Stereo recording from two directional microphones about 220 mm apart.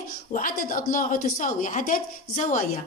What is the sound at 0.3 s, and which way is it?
A woman's voice, 40° left (ahead or behind).